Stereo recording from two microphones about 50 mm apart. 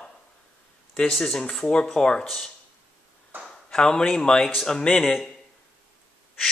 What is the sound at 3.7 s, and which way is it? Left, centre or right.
Speech, centre.